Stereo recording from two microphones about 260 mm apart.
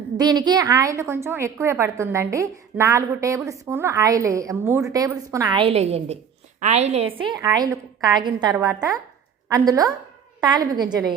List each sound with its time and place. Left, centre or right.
0.2 s a woman's voice: centre